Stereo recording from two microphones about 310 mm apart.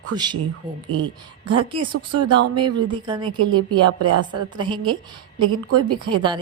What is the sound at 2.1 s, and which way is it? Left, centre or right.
Speech, right.